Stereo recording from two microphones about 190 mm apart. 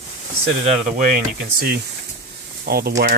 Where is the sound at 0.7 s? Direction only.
40° right (ahead or behind).